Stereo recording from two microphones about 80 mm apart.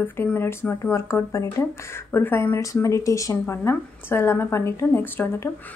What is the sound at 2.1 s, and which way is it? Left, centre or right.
A woman's voice, left.